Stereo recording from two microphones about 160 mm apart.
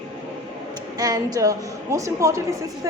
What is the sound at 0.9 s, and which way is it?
Speech, 25° right (ahead or behind).